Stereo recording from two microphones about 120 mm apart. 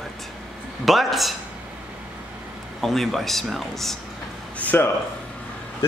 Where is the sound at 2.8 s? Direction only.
Centre (ahead or behind).